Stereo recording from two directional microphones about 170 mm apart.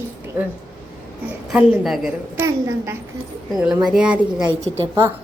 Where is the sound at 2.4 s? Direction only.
15° right (ahead or behind).